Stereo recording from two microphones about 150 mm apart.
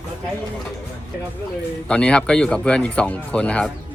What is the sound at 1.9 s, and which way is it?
Speech, 5° left (ahead or behind).